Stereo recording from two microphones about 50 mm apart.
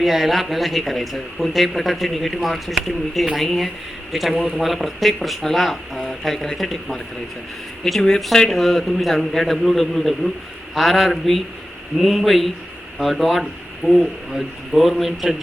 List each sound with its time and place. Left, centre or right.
0.0 s a man's voice: centre